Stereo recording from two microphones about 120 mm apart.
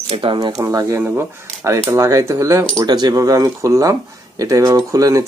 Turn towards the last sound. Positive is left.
turn(degrees=-30)  # may be behind; listen again after turning